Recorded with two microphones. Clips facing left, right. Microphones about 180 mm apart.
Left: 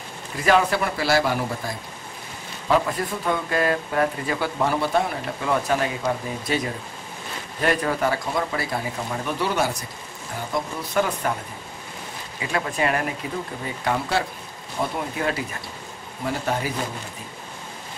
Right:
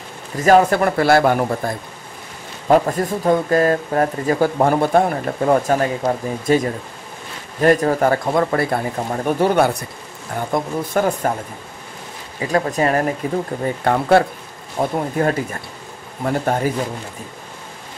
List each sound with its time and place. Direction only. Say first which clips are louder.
0.4 s speech: right 7 dB; 45° right (ahead or behind)
12.4 s speech: right 7 dB; 40° right (ahead or behind)
13.8 s speech: right 9 dB; 55° right (ahead or behind)